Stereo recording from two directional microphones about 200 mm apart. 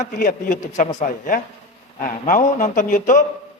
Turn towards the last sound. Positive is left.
turn(degrees=40)  # may be behind; listen again after turning